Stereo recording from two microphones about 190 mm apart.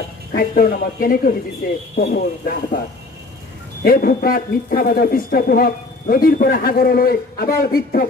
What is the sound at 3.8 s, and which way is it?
A man's voice, 50° left (ahead or behind).